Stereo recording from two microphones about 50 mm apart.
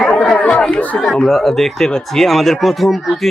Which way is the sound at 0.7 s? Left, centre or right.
Left.